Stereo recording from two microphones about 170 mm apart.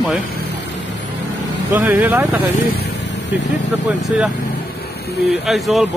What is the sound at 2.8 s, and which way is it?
Vehicle, 90° left.